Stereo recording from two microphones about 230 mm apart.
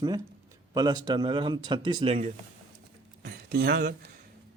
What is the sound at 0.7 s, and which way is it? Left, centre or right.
Speech, centre.